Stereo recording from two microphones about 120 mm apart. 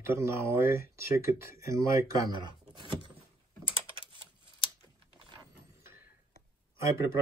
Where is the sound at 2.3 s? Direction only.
40° right (ahead or behind).